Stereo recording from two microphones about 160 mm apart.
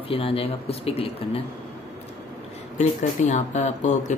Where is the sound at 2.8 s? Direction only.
45° left (ahead or behind).